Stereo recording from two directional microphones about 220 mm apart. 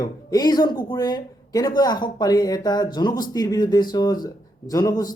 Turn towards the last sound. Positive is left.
turn(degrees=15)  # may be behind; listen again after turning